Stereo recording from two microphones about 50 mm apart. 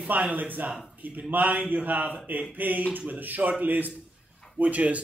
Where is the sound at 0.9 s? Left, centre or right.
Right.